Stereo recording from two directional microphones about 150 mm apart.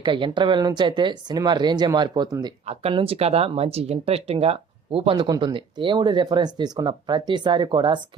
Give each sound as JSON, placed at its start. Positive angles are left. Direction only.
{"t": 0.0, "sound": "speech", "side_deg": -35}
{"t": 2.6, "sound": "speech", "side_deg": -40}